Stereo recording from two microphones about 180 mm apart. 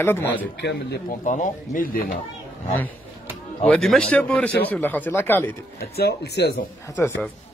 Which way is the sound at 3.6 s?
5° left (ahead or behind).